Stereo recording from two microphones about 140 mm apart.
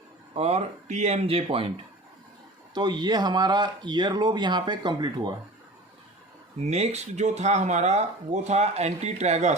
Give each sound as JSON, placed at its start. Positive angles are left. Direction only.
{"t": 0.3, "sound": "speech", "side_deg": -50}
{"t": 2.7, "sound": "speech", "side_deg": -30}
{"t": 6.6, "sound": "speech", "side_deg": -50}